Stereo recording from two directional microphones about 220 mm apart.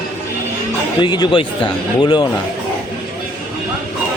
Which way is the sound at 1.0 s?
20° left (ahead or behind).